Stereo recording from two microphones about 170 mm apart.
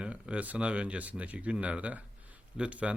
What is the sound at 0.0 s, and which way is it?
Speech, 5° right (ahead or behind).